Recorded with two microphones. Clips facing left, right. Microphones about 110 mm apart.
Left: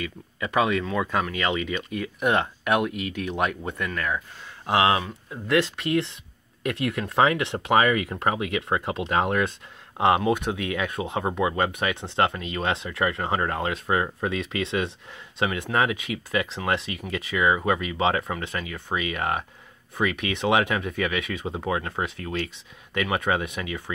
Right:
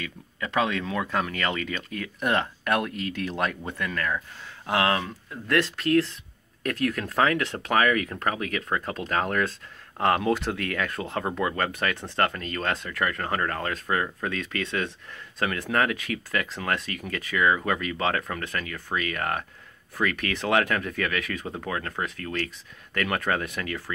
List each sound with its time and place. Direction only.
0.0 s speech: 10° left (ahead or behind)
12.0 s speech: 25° left (ahead or behind)
12.4 s speech: 10° left (ahead or behind)
21.5 s speech: 20° left (ahead or behind)